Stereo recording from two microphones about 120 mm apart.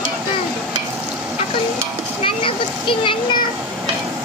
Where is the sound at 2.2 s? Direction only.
45° left (ahead or behind).